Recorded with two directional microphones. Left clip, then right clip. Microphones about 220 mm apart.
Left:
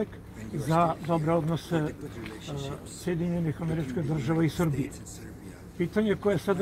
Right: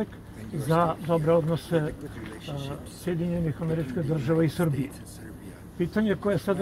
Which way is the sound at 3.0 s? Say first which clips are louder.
Right 1 dB; 35° right (ahead or behind).